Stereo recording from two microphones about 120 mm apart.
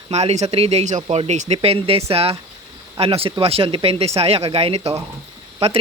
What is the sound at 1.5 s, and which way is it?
Speech, 55° right (ahead or behind).